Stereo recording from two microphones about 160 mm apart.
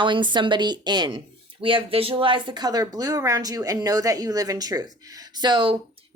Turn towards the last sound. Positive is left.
turn(degrees=-30)  # may be behind; listen again after turning